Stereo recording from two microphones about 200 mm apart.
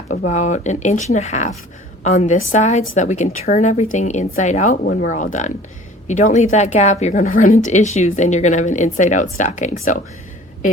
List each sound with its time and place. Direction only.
0.3 s speech: 35° left (ahead or behind)